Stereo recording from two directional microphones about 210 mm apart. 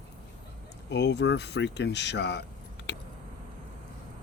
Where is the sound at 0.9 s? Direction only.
55° left (ahead or behind).